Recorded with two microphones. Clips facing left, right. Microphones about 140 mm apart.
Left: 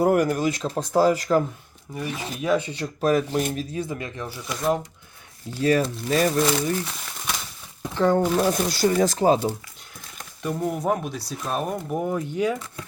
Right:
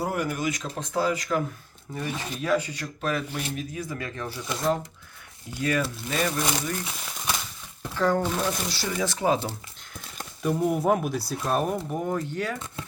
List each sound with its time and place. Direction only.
0.0 s speech: 50° left (ahead or behind)
0.3 s speech: 35° left (ahead or behind)
2.0 s speech: 15° left (ahead or behind)
5.5 s speech: 35° left (ahead or behind)
7.8 s a sound: 20° left (ahead or behind)
8.4 s speech: 45° left (ahead or behind)
10.4 s speech: 5° right (ahead or behind)